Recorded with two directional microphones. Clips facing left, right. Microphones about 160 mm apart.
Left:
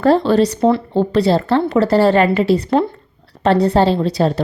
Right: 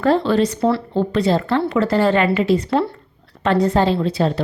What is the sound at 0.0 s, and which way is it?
Speech, 35° left (ahead or behind).